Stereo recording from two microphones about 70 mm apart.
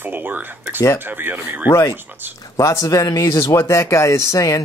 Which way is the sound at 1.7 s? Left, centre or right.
Left.